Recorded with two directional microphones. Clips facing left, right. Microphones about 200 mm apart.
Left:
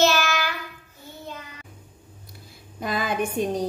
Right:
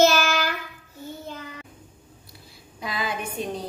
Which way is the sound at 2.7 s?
50° left (ahead or behind).